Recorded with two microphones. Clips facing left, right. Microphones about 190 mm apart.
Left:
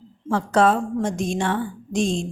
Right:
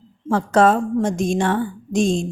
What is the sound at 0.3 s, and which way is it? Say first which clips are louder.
A woman's voice: right 3 dB; 45° right (ahead or behind).